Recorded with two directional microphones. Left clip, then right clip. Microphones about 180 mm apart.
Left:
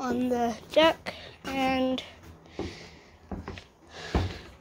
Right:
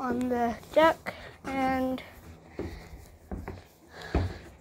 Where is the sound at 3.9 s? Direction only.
5° left (ahead or behind).